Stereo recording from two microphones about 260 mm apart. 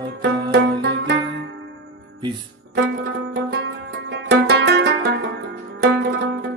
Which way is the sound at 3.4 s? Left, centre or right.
Right.